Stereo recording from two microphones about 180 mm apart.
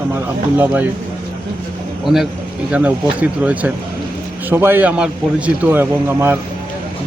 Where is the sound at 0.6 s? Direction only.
10° right (ahead or behind).